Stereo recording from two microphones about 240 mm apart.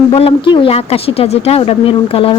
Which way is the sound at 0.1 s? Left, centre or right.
Left.